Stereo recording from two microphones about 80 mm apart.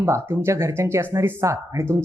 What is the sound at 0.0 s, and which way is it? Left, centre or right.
Speech, right.